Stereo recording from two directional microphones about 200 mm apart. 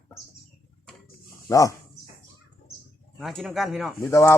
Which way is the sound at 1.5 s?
15° left (ahead or behind).